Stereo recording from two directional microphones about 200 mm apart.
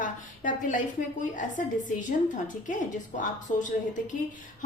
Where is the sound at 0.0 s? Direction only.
40° left (ahead or behind).